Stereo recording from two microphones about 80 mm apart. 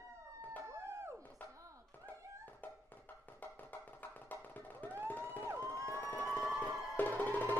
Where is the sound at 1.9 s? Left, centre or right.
Left.